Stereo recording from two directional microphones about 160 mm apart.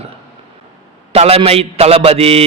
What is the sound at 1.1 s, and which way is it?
A man's voice, 40° right (ahead or behind).